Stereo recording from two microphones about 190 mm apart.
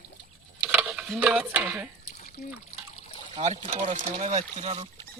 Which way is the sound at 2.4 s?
55° left (ahead or behind).